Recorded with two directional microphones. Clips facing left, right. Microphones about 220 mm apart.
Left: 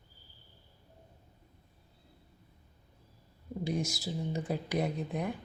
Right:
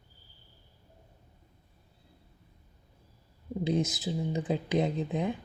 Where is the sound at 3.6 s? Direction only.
20° right (ahead or behind).